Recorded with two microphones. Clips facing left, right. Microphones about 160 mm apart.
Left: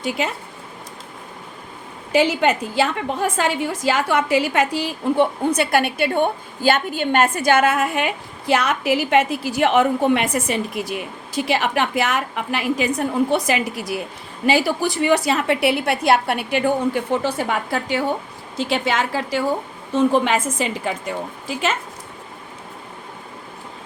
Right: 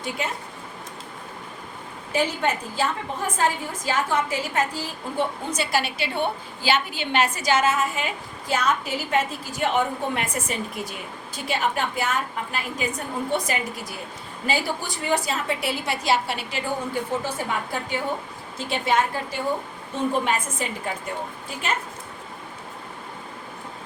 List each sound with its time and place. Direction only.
0.0 s speech: 85° left
2.1 s a woman's voice: 80° left